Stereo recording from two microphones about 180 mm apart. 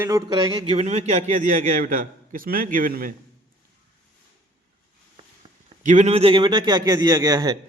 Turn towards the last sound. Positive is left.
turn(degrees=-20)  # may be behind; listen again after turning